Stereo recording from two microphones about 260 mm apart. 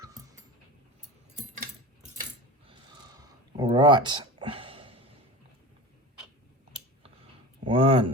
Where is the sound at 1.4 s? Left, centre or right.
Right.